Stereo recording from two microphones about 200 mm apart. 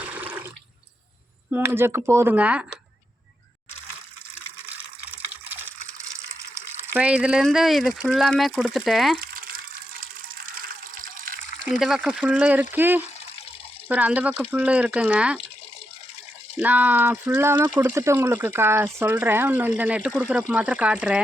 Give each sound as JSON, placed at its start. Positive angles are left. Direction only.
{"t": 0.0, "sound": "water", "side_deg": -5}
{"t": 1.5, "sound": "speech", "side_deg": -10}
{"t": 6.9, "sound": "speech", "side_deg": -5}
{"t": 9.3, "sound": "water", "side_deg": -45}
{"t": 11.6, "sound": "speech", "side_deg": 0}
{"t": 16.6, "sound": "speech", "side_deg": -5}